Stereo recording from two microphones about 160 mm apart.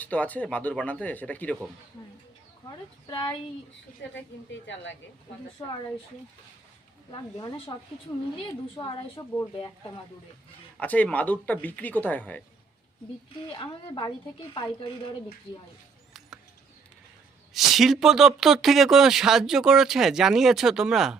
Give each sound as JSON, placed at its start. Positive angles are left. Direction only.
{"t": 0.0, "sound": "speech", "side_deg": 10}
{"t": 2.6, "sound": "speech", "side_deg": 25}
{"t": 4.0, "sound": "speech", "side_deg": 90}
{"t": 5.6, "sound": "speech", "side_deg": 20}
{"t": 7.1, "sound": "speech", "side_deg": 30}
{"t": 8.7, "sound": "speech", "side_deg": 30}
{"t": 10.8, "sound": "speech", "side_deg": 10}
{"t": 13.5, "sound": "speech", "side_deg": 30}
{"t": 17.5, "sound": "speech", "side_deg": 0}